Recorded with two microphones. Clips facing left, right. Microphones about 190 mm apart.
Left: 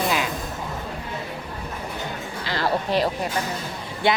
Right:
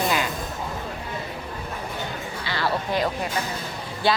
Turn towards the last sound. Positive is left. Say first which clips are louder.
# left 1 dB
turn(degrees=25)  # may be behind; listen again after turning